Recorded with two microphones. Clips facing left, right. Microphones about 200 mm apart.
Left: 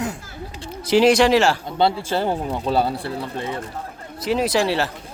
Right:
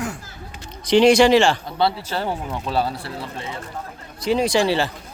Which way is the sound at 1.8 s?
25° left (ahead or behind).